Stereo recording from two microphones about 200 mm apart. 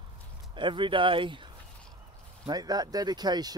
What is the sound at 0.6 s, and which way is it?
Speech, 25° right (ahead or behind).